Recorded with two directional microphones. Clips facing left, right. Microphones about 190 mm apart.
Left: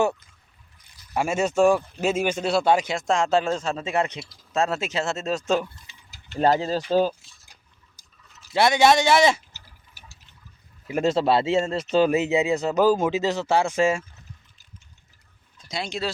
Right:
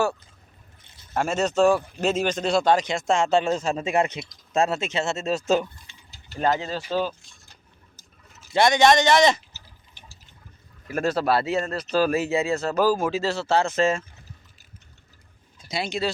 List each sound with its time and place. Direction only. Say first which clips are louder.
0.8 s a sound: right 3 dB; 25° right (ahead or behind)
1.1 s speech: even; 10° left (ahead or behind); by 4.2 s 10° right (ahead or behind)
4.7 s speech: even; centre (ahead or behind)
6.4 s speech: left 3 dB; 40° left (ahead or behind)
7.2 s a sound: right 3 dB; 5° left (ahead or behind)
10.8 s speech: left 2 dB; 20° left (ahead or behind)
15.5 s speech: right 2 dB; 5° right (ahead or behind)